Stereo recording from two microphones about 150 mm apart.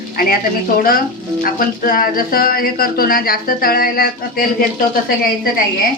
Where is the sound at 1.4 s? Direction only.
70° left (ahead or behind).